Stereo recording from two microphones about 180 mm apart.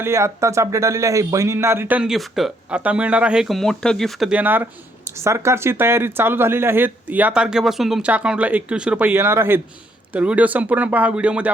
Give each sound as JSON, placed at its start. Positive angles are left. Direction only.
{"t": 0.0, "sound": "speech", "side_deg": -15}